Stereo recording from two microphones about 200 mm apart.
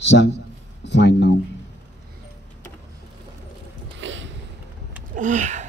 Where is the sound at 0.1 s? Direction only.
60° left (ahead or behind).